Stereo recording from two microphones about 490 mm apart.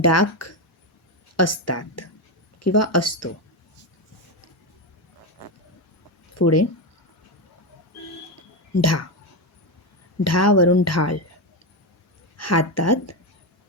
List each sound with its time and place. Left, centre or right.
0.0 s a woman's voice: left
6.3 s speech: left
8.8 s speech: left
10.2 s speech: left
12.4 s speech: left